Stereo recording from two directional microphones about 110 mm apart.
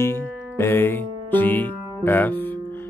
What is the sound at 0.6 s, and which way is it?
Speech, 20° left (ahead or behind).